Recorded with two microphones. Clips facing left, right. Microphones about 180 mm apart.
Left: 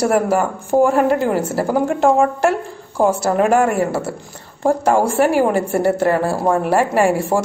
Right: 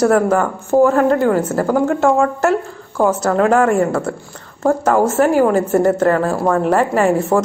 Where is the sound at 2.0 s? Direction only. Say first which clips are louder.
Even; 15° left (ahead or behind).